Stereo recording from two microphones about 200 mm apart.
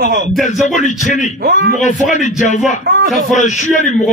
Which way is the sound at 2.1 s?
35° left (ahead or behind).